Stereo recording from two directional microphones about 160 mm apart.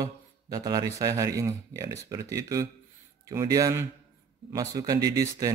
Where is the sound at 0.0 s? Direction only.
25° right (ahead or behind).